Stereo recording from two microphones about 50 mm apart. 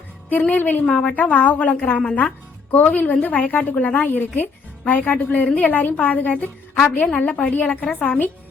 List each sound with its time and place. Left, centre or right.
0.5 s a woman's voice: left
0.9 s a woman's voice: left
6.3 s a woman's voice: left